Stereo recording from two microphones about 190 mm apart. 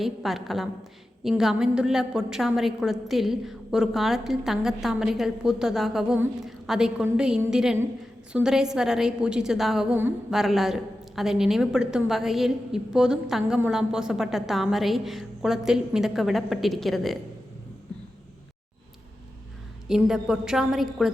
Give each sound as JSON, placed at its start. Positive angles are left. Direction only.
{"t": 0.0, "sound": "a woman's voice", "side_deg": 0}
{"t": 19.9, "sound": "a woman's voice", "side_deg": 0}